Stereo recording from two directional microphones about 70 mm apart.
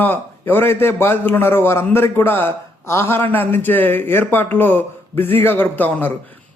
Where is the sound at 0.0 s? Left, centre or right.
Left.